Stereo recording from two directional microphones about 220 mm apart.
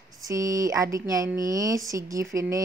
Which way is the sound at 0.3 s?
15° right (ahead or behind).